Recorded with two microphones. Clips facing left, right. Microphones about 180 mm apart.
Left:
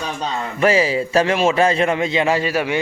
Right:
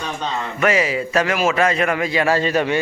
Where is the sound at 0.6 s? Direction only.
30° left (ahead or behind); by 2.8 s 10° left (ahead or behind).